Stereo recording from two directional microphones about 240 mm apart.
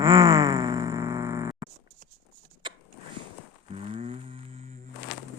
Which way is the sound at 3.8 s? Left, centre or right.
Right.